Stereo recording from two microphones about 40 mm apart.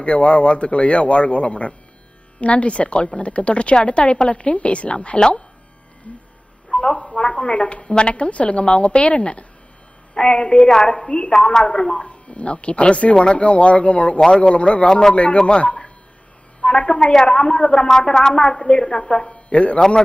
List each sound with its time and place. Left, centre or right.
0.0 s a woman's voice: left
6.7 s a sound: left
7.2 s a woman's voice: left
12.0 s speech: left
14.2 s a woman's voice: left